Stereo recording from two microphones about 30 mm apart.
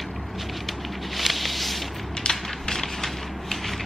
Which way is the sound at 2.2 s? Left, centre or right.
Left.